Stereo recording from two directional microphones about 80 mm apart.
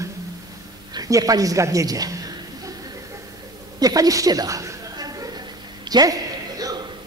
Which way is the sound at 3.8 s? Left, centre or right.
Right.